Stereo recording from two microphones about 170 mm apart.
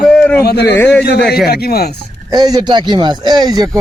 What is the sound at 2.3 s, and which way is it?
Speech, 25° right (ahead or behind).